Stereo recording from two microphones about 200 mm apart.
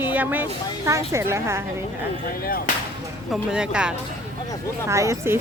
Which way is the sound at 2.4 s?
45° left (ahead or behind).